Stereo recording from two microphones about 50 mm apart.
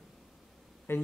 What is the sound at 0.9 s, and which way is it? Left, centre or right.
Speech, left.